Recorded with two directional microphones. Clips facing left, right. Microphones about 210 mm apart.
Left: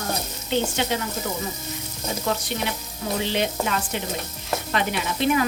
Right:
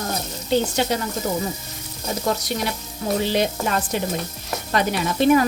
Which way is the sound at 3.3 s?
40° right (ahead or behind).